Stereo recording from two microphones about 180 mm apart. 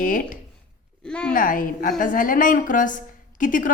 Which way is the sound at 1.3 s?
50° left (ahead or behind).